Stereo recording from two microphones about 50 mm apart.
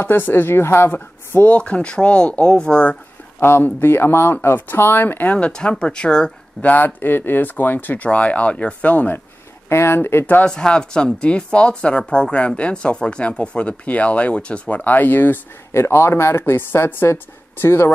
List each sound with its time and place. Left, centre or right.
0.0 s a woman's voice: left
1.5 s speech: left
3.3 s a woman's voice: left
5.5 s speech: centre
6.6 s speech: left
9.7 s a woman's voice: left
10.4 s speech: centre
14.9 s speech: left
15.7 s a woman's voice: left